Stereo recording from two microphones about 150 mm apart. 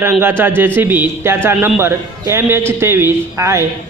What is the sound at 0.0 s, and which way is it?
A man's voice, 15° right (ahead or behind).